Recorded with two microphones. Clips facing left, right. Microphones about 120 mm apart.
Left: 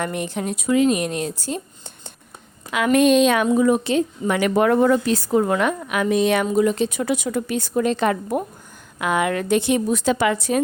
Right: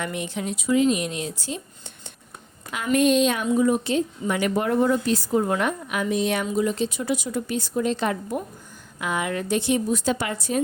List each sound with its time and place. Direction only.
0.0 s a woman's voice: 45° left (ahead or behind)
2.7 s a woman's voice: 85° left